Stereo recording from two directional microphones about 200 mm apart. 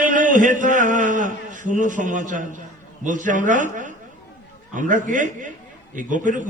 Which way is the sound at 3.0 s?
40° right (ahead or behind).